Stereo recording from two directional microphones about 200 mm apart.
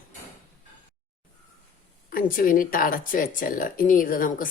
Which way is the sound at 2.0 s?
45° left (ahead or behind).